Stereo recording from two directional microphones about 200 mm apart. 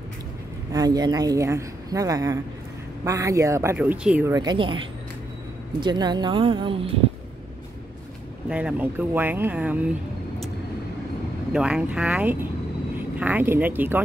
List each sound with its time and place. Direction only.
0.7 s speech: 20° right (ahead or behind)
8.5 s speech: 5° right (ahead or behind)
11.5 s speech: 5° right (ahead or behind)